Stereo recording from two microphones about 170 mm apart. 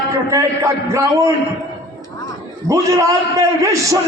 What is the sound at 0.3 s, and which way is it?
Speech, 20° right (ahead or behind).